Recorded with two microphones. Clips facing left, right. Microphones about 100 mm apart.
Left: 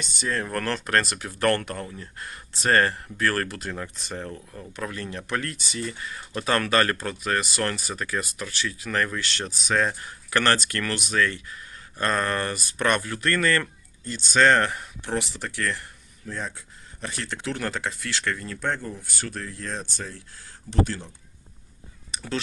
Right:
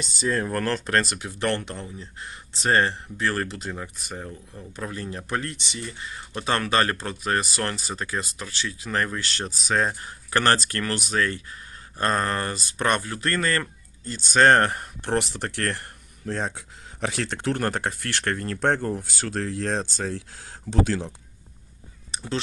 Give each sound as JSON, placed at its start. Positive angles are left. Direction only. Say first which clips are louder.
{"t": 0.3, "sound": "speech", "louder": "right 3 dB", "side_deg": -15}
{"t": 0.6, "sound": "speech", "louder": "right 1 dB", "side_deg": -30}
{"t": 4.7, "sound": "speech", "louder": "even", "side_deg": -25}
{"t": 14.3, "sound": "speech", "louder": "right 2 dB", "side_deg": -45}
{"t": 22.1, "sound": "cat", "louder": "right 1 dB", "side_deg": -30}